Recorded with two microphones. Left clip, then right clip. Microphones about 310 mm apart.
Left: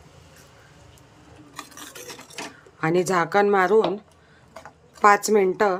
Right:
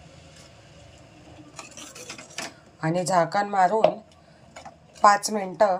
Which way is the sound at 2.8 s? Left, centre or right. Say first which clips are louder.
Left 1 dB; left.